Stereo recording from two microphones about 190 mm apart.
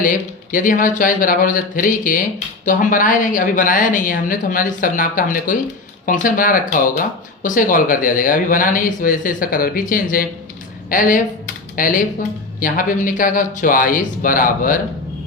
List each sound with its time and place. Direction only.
0.0 s a woman's voice: 45° left (ahead or behind)